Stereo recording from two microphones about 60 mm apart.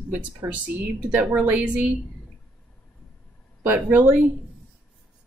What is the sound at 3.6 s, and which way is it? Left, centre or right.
Speech, right.